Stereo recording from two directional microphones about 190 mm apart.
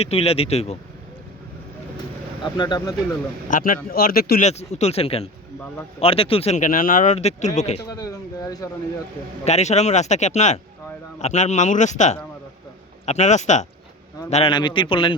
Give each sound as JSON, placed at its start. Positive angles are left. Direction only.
{"t": 0.0, "sound": "speech", "side_deg": 30}
{"t": 2.4, "sound": "speech", "side_deg": 25}
{"t": 3.5, "sound": "speech", "side_deg": 45}
{"t": 4.4, "sound": "speech", "side_deg": 35}
{"t": 7.9, "sound": "speech", "side_deg": 20}
{"t": 9.4, "sound": "speech", "side_deg": 35}